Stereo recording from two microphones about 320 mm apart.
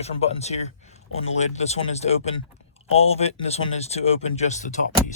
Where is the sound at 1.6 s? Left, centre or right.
Centre.